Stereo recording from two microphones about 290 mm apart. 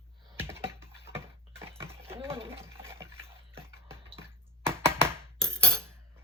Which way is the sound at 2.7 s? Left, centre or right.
Centre.